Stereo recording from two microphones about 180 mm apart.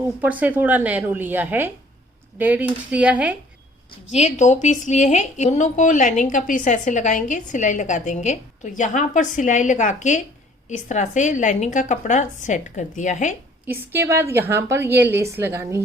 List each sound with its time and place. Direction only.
0.0 s a woman's voice: 10° right (ahead or behind)
4.1 s a woman's voice: 40° left (ahead or behind)
13.7 s a woman's voice: 15° right (ahead or behind)